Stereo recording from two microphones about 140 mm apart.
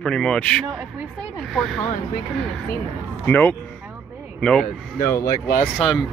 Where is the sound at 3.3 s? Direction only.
15° left (ahead or behind).